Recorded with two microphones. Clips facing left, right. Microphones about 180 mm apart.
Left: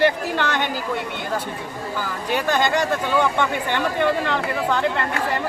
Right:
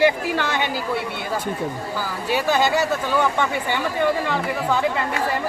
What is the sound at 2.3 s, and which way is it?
Speech, 5° right (ahead or behind).